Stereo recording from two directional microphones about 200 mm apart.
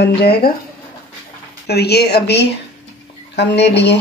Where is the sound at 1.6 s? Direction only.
55° left (ahead or behind).